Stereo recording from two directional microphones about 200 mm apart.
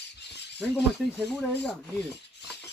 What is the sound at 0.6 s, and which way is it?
Speech, 5° left (ahead or behind).